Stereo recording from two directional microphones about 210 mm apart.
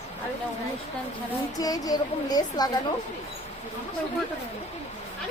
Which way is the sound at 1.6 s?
15° left (ahead or behind).